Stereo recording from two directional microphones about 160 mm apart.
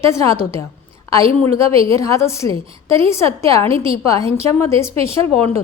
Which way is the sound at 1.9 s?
20° left (ahead or behind).